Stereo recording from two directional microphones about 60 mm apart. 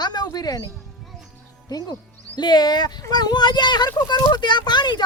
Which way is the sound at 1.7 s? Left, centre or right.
Left.